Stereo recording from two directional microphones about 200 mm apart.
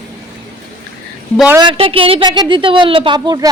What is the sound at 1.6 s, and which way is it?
A woman's voice, 25° right (ahead or behind).